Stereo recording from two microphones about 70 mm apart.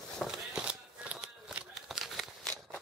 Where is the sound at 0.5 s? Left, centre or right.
Centre.